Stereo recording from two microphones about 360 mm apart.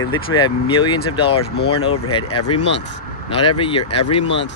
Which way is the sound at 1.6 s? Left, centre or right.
Left.